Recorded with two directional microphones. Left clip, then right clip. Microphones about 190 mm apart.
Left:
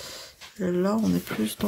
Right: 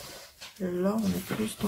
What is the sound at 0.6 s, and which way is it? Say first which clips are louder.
Speech: left 6 dB; 55° left (ahead or behind).